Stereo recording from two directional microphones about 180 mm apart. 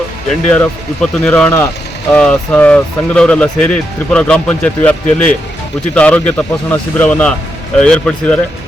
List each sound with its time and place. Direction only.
0.5 s speech: 5° left (ahead or behind)